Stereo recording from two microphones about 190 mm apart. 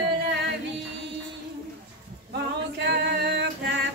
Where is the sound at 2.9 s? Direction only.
60° right (ahead or behind).